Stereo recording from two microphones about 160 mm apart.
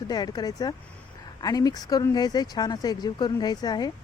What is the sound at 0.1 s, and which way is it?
Speech, 25° left (ahead or behind).